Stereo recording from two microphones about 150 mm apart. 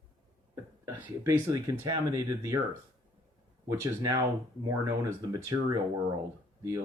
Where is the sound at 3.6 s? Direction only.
20° right (ahead or behind).